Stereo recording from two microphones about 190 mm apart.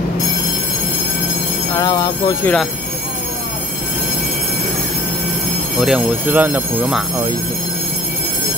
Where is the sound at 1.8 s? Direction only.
20° left (ahead or behind).